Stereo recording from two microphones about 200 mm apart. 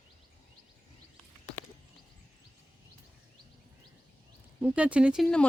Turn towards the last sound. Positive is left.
turn(degrees=0)  # may be behind; listen again after turning